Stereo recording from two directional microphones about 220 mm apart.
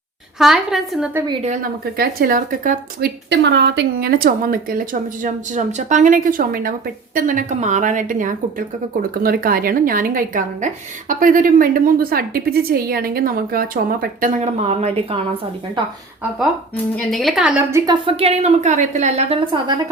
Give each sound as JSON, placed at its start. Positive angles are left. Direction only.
{"t": 0.3, "sound": "a woman's voice", "side_deg": 0}
{"t": 1.6, "sound": "a woman's voice", "side_deg": -45}
{"t": 3.2, "sound": "a woman's voice", "side_deg": -50}
{"t": 17.0, "sound": "a woman's voice", "side_deg": 0}
{"t": 18.0, "sound": "a woman's voice", "side_deg": -30}